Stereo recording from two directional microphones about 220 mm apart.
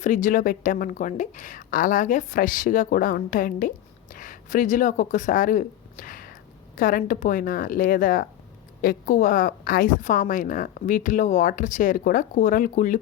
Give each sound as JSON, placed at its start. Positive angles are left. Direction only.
{"t": 0.0, "sound": "a woman's voice", "side_deg": 35}